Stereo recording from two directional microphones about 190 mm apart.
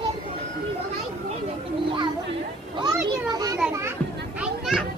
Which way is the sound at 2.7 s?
20° right (ahead or behind).